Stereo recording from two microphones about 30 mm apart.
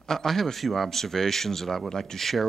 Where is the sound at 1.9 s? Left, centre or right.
Left.